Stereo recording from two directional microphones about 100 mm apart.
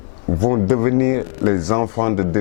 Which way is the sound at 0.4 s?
15° left (ahead or behind).